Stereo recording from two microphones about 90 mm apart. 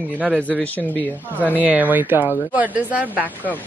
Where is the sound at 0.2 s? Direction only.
20° right (ahead or behind).